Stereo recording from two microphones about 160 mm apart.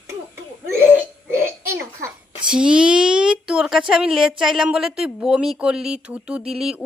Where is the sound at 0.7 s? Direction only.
15° right (ahead or behind).